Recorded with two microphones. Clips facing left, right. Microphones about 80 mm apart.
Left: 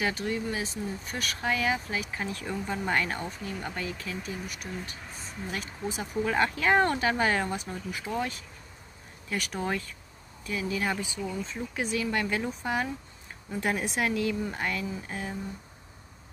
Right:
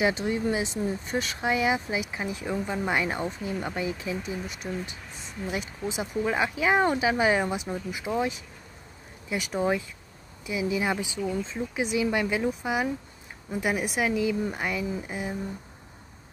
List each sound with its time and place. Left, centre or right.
0.0 s speech: right